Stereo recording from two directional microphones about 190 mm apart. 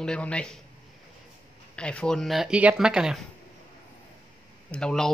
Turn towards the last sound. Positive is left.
turn(degrees=5)  # may be behind; listen again after turning